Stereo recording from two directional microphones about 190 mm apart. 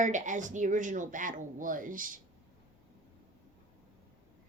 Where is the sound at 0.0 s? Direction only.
40° right (ahead or behind).